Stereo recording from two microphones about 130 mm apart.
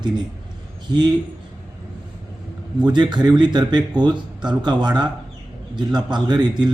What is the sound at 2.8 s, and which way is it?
Speech, 35° right (ahead or behind).